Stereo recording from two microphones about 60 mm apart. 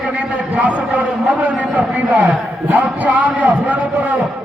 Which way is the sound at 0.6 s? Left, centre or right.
Right.